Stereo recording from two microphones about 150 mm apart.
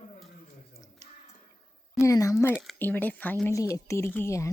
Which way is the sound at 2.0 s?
20° left (ahead or behind).